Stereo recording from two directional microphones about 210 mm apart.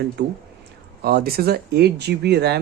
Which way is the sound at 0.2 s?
50° right (ahead or behind).